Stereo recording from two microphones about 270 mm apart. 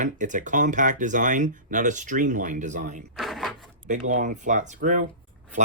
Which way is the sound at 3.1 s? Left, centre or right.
Centre.